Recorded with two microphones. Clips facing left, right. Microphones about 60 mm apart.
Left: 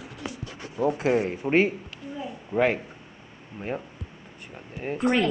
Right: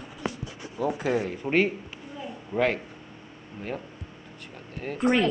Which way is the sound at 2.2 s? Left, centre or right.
Centre.